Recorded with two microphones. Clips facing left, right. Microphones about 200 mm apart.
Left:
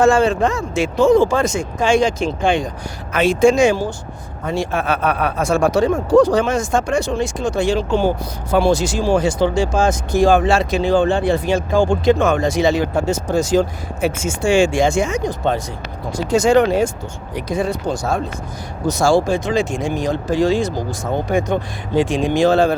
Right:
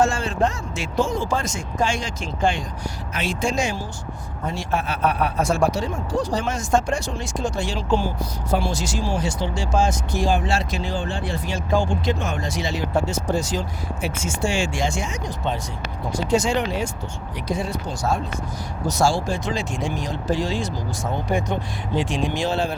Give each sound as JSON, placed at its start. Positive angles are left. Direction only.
{"t": 0.0, "sound": "speech", "side_deg": 60}